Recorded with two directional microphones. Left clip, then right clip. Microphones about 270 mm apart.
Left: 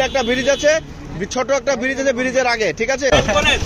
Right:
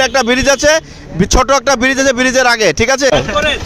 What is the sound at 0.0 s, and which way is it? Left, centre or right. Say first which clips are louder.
Speech: right 6 dB; right.